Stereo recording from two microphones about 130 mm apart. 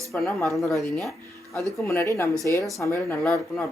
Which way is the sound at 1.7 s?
20° left (ahead or behind).